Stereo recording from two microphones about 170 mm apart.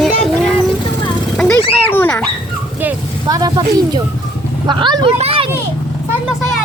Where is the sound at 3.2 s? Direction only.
20° right (ahead or behind).